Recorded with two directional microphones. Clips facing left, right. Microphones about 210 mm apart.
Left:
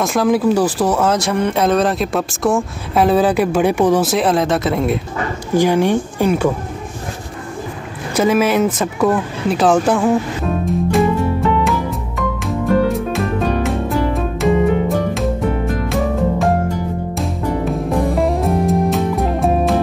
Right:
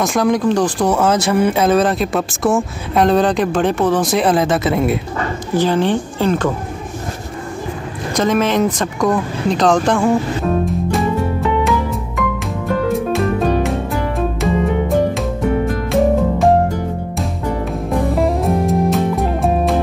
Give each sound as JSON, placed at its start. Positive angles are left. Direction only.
{"t": 0.0, "sound": "speech", "side_deg": 0}
{"t": 4.1, "sound": "speech", "side_deg": 0}
{"t": 5.5, "sound": "speech", "side_deg": 10}
{"t": 8.1, "sound": "speech", "side_deg": 10}
{"t": 12.8, "sound": "music", "side_deg": 0}
{"t": 17.2, "sound": "music", "side_deg": 0}